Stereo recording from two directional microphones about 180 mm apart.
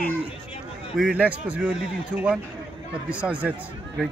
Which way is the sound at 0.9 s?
5° right (ahead or behind).